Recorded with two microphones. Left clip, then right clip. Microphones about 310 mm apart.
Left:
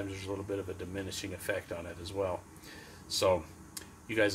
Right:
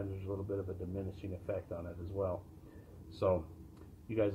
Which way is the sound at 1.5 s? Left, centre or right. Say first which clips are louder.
Left 4 dB; left.